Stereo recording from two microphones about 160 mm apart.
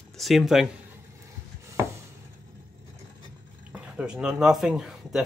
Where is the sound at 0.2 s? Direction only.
Centre (ahead or behind).